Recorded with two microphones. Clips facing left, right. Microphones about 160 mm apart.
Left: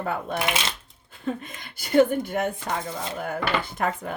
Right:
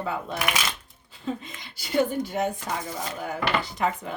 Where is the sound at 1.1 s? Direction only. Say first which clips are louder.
Left 2 dB; 55° left (ahead or behind).